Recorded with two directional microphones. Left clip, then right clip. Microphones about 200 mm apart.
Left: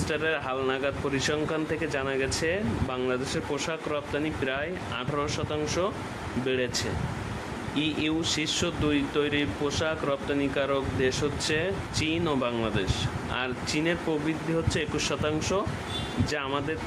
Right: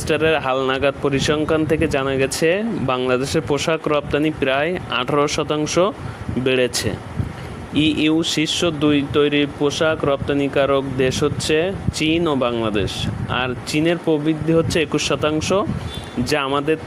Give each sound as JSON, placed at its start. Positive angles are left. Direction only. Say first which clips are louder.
{"t": 0.1, "sound": "speech", "louder": "right 12 dB", "side_deg": -45}